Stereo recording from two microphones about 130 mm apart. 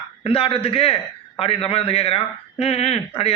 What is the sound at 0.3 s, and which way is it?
A man's voice, 45° left (ahead or behind).